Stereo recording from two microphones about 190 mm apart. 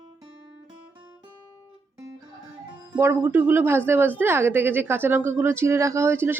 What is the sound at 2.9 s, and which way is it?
Speech, 10° right (ahead or behind).